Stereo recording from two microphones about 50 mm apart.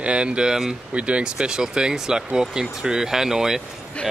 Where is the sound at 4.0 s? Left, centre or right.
Left.